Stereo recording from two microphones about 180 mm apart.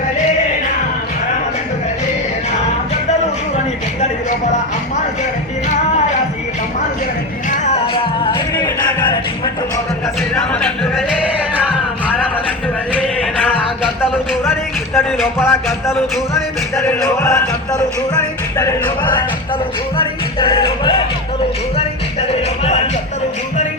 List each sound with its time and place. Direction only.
7.6 s music: 35° left (ahead or behind)
10.3 s music: 5° left (ahead or behind)
14.9 s speech: centre (ahead or behind)
16.7 s speech: 5° left (ahead or behind)
20.0 s music: 30° left (ahead or behind)